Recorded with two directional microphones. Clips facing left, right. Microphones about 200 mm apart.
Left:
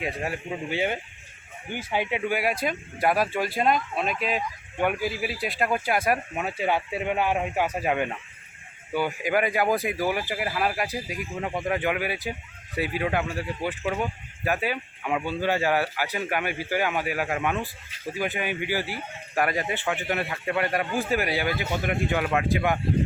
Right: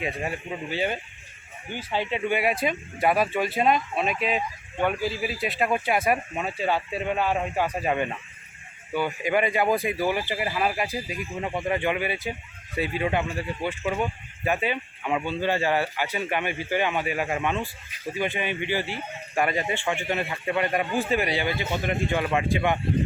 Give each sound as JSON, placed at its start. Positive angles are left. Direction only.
{"t": 0.0, "sound": "speech", "side_deg": 0}
{"t": 0.7, "sound": "speech", "side_deg": 15}
{"t": 2.4, "sound": "speech", "side_deg": 0}
{"t": 4.8, "sound": "speech", "side_deg": 10}